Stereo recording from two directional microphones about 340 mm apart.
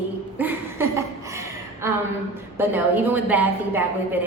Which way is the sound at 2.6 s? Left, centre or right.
Centre.